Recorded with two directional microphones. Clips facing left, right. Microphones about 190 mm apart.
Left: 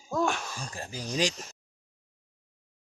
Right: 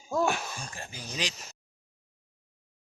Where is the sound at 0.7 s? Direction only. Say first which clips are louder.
Left 6 dB; 35° left (ahead or behind).